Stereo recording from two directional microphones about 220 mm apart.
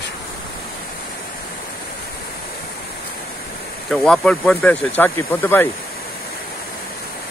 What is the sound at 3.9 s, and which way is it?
Speech, centre (ahead or behind).